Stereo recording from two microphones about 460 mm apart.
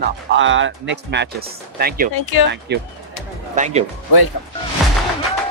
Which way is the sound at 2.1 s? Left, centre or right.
Left.